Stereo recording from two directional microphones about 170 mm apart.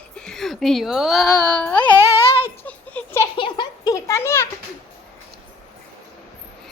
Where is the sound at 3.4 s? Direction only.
25° left (ahead or behind).